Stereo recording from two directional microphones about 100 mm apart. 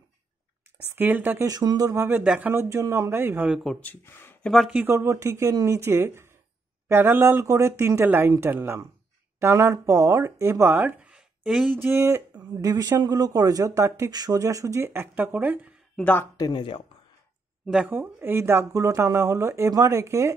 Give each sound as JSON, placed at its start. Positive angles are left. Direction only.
{"t": 0.9, "sound": "speech", "side_deg": -20}
{"t": 1.4, "sound": "speech", "side_deg": -40}
{"t": 2.2, "sound": "speech", "side_deg": -10}
{"t": 2.5, "sound": "speech", "side_deg": -25}
{"t": 3.4, "sound": "speech", "side_deg": -5}
{"t": 3.8, "sound": "speech", "side_deg": 20}
{"t": 4.8, "sound": "speech", "side_deg": -30}
{"t": 11.7, "sound": "speech", "side_deg": -20}
{"t": 12.4, "sound": "speech", "side_deg": -35}
{"t": 14.1, "sound": "speech", "side_deg": -40}
{"t": 16.0, "sound": "speech", "side_deg": 15}
{"t": 16.3, "sound": "speech", "side_deg": 45}
{"t": 17.8, "sound": "speech", "side_deg": -20}